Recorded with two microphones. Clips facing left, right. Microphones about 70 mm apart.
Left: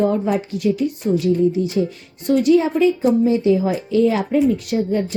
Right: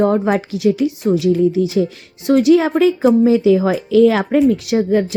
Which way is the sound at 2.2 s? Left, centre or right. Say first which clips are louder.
Right 3 dB; right.